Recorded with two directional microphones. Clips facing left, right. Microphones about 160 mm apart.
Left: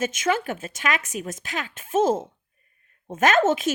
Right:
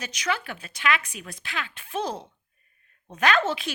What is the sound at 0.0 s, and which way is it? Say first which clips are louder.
Speech: left 6 dB; 50° left (ahead or behind).